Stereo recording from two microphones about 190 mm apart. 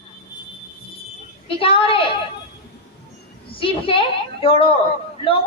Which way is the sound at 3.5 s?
30° left (ahead or behind).